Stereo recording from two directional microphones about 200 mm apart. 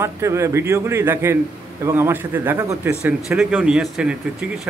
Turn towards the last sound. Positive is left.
turn(degrees=0)  # may be behind; listen again after turning